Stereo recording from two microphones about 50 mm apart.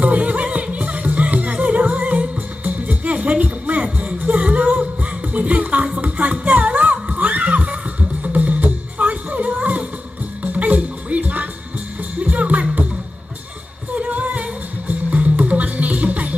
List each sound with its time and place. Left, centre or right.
0.0 s music: right
6.4 s heart sounds: right
10.4 s music: right
13.9 s music: right